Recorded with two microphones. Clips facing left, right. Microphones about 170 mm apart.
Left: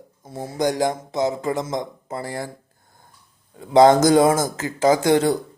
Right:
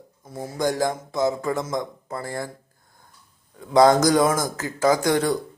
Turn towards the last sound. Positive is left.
turn(degrees=25)  # may be behind; listen again after turning